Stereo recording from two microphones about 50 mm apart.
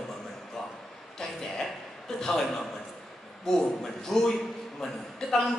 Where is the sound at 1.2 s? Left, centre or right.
Centre.